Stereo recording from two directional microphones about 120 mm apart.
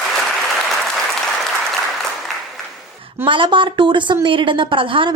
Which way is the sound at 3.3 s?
45° right (ahead or behind).